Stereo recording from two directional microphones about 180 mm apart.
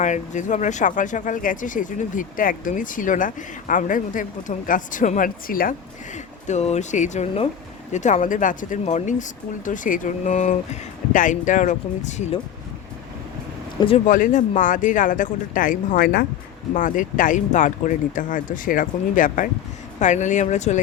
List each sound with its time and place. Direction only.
0.0 s speech: 45° left (ahead or behind)
6.5 s speech: 40° left (ahead or behind)
13.7 s speech: 30° left (ahead or behind)
14.1 s speech: 45° left (ahead or behind)